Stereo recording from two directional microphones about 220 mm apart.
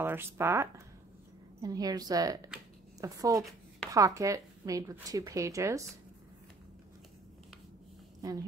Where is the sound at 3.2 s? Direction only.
15° right (ahead or behind).